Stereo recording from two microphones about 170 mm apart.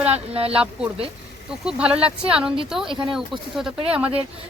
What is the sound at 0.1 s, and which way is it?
Speech, 35° right (ahead or behind).